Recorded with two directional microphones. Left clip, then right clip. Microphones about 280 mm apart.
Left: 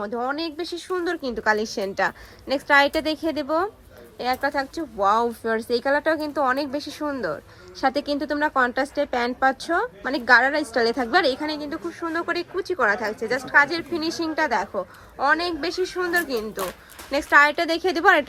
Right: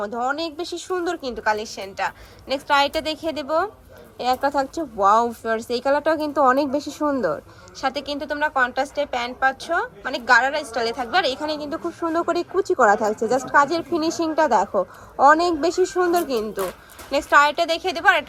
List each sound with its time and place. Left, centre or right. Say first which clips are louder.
0.0 s speech: right 2 dB; centre
5.6 s speech: even; centre
5.9 s speech: right 4 dB; centre